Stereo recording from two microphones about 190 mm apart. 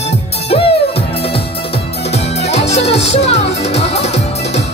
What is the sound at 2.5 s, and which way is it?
Music, 35° left (ahead or behind).